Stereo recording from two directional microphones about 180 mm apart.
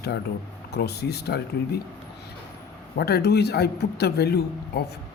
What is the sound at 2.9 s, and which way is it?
Speech, 60° left (ahead or behind).